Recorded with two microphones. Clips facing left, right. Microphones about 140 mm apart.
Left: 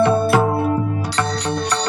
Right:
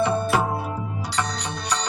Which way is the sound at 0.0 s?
70° left (ahead or behind).